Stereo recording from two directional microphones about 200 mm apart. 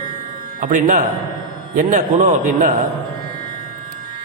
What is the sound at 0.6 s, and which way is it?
A man's voice, 40° right (ahead or behind).